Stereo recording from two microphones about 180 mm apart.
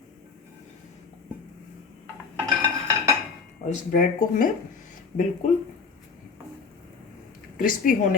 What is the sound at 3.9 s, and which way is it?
Speech, 50° left (ahead or behind).